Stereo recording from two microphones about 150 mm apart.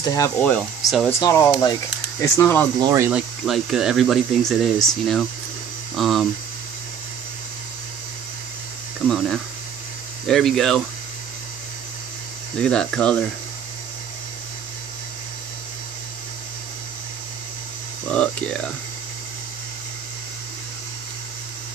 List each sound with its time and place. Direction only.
0.0 s speech: 25° left (ahead or behind)
0.4 s speech: 10° left (ahead or behind)
1.2 s speech: 25° left (ahead or behind)
2.8 s speech: 20° right (ahead or behind)
3.1 s speech: 5° right (ahead or behind)
9.0 s speech: 5° left (ahead or behind)
12.5 s speech: 5° left (ahead or behind)
18.0 s speech: 5° left (ahead or behind)